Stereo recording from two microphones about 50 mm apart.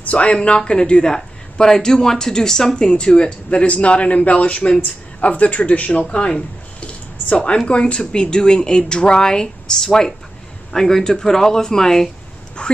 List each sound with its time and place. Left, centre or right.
0.0 s speech: left; by 12.1 s centre
12.6 s speech: left